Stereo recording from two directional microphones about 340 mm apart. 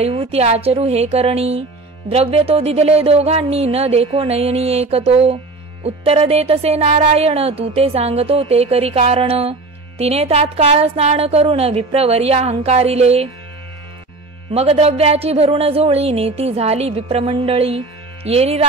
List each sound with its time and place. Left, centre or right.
0.0 s speech: centre
14.5 s speech: centre